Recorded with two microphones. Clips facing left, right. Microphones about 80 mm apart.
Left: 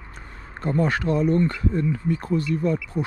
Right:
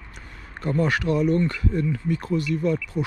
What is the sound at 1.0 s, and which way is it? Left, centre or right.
Speech, left.